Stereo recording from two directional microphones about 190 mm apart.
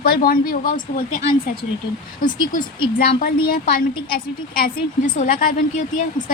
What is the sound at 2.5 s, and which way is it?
A woman's voice, 45° left (ahead or behind).